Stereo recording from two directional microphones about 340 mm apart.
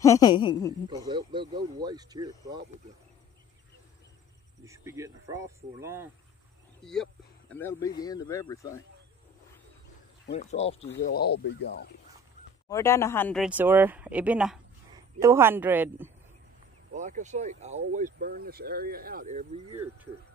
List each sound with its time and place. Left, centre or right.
0.0 s a woman's voice: centre
0.8 s speech: centre
4.6 s a woman's voice: centre
10.3 s a woman's voice: centre
10.9 s speech: left
12.6 s speech: centre
16.9 s speech: right
19.7 s speech: centre